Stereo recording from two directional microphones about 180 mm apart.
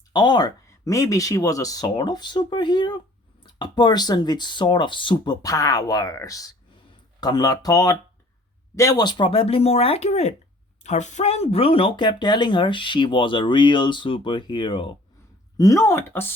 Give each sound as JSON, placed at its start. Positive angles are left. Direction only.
{"t": 0.1, "sound": "speech", "side_deg": 25}